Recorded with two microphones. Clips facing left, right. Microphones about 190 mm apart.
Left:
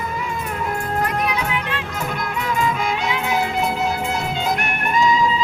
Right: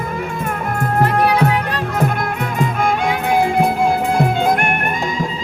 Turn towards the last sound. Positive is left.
turn(degrees=-55)  # may be behind; listen again after turning